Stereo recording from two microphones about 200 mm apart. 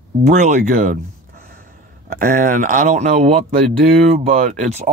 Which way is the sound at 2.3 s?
45° right (ahead or behind).